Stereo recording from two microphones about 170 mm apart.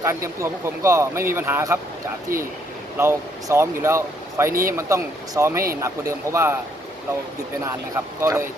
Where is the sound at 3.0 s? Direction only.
15° right (ahead or behind).